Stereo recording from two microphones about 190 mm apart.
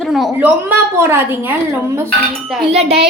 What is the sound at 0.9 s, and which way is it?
Speech, 10° right (ahead or behind).